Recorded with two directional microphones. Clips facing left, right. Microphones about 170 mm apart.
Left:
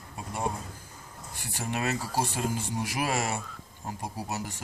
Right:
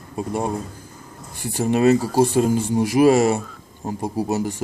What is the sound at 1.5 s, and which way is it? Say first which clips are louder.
Speech: right 15 dB; 30° right (ahead or behind).